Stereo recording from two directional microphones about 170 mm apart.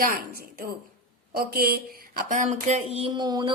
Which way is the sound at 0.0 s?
55° right (ahead or behind).